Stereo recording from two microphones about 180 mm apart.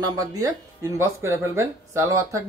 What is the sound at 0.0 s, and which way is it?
Speech, 20° right (ahead or behind).